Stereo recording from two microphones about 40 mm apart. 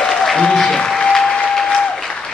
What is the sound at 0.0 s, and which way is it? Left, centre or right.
Applause, centre.